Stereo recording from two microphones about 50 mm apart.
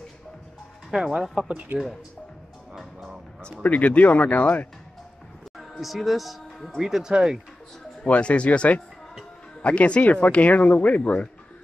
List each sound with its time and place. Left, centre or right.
1.2 s speech: centre
1.5 s speech: right
2.8 s music: centre
3.6 s speech: left
5.6 s speech: centre
8.1 s speech: left